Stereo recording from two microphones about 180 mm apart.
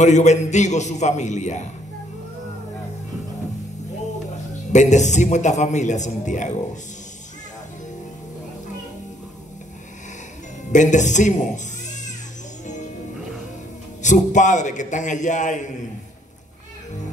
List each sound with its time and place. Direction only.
0.0 s a man's voice: 40° left (ahead or behind)
4.7 s a man's voice: 40° left (ahead or behind)
10.7 s speech: 45° left (ahead or behind)
14.0 s a man's voice: 45° left (ahead or behind)